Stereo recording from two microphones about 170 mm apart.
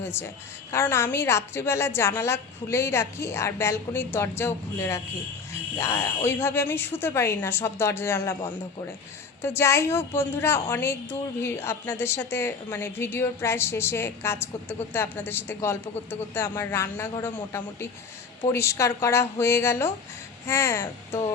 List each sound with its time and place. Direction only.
0.0 s a woman's voice: 15° left (ahead or behind)